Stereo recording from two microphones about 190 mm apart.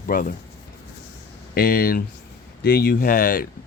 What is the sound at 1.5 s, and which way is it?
Speech, 50° left (ahead or behind).